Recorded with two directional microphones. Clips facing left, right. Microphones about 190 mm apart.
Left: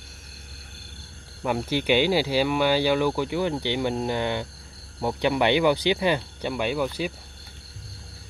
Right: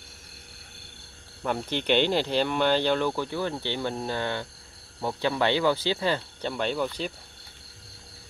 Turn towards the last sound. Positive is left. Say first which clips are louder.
# left 2 dB
turn(degrees=10)  # may be behind; listen again after turning